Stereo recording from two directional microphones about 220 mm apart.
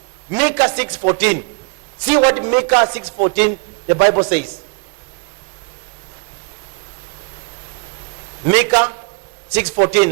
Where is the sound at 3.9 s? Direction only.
25° right (ahead or behind).